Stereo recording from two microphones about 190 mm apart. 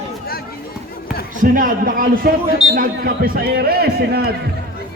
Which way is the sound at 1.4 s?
45° right (ahead or behind).